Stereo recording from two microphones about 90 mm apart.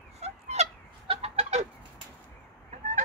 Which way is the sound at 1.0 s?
75° right (ahead or behind).